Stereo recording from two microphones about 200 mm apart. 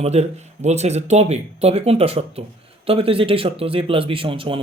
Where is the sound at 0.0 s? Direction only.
30° right (ahead or behind).